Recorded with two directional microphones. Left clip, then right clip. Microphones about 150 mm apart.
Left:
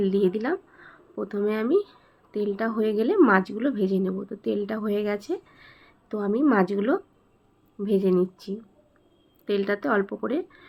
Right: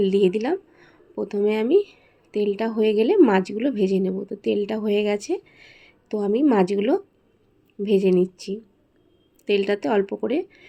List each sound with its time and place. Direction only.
0.0 s speech: 20° right (ahead or behind)